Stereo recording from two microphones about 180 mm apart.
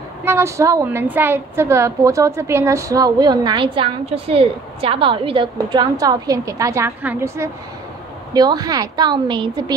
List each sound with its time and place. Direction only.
0.2 s a woman's voice: 15° right (ahead or behind)